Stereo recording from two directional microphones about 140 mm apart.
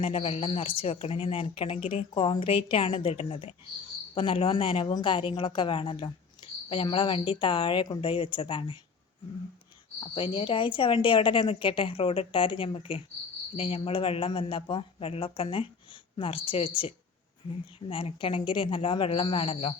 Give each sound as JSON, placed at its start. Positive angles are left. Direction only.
{"t": 0.0, "sound": "speech", "side_deg": 45}
{"t": 10.0, "sound": "speech", "side_deg": 40}